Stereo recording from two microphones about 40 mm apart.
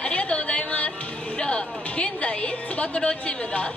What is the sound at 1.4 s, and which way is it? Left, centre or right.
Music, left.